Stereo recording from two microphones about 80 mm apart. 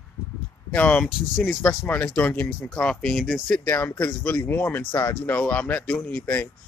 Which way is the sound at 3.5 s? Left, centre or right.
Left.